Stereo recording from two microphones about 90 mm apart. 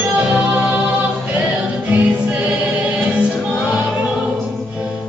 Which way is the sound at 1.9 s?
20° right (ahead or behind).